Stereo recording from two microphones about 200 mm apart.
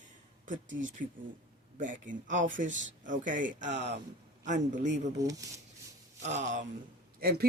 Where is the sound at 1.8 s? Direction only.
40° right (ahead or behind).